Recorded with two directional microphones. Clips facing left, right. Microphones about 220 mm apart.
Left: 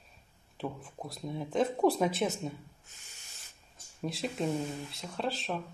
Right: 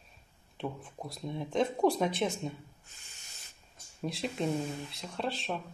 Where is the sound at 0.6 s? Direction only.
Centre (ahead or behind).